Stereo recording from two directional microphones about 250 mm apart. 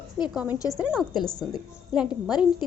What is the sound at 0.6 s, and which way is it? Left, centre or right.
Speech, centre.